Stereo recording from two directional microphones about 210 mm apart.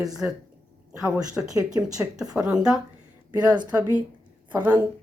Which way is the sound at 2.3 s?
5° right (ahead or behind).